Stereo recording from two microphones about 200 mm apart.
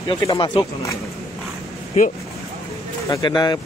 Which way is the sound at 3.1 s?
20° left (ahead or behind).